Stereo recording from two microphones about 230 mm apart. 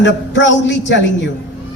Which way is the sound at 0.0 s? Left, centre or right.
Left.